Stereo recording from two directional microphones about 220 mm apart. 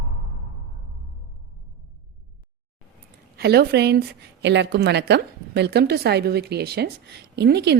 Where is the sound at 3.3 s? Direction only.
45° right (ahead or behind).